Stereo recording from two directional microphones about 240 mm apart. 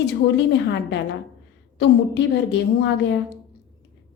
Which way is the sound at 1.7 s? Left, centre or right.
Left.